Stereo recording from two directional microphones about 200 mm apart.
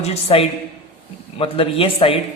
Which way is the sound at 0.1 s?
30° left (ahead or behind).